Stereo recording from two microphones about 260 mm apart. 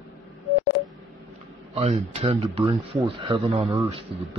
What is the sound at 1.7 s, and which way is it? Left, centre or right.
Speech, right.